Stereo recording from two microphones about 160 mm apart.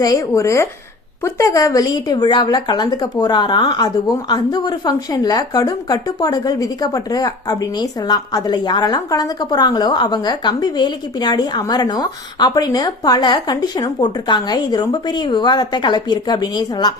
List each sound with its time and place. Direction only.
0.0 s a woman's voice: 20° left (ahead or behind)